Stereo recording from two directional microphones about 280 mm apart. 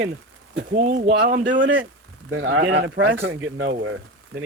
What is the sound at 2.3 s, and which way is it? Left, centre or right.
Speech, right.